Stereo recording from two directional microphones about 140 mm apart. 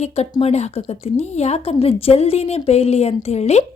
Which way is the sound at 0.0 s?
50° left (ahead or behind).